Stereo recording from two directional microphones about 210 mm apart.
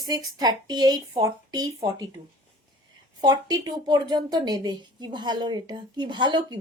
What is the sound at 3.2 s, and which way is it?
A woman's voice, 20° right (ahead or behind).